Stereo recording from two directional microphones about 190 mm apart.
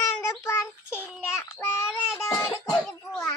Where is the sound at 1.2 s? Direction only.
10° left (ahead or behind).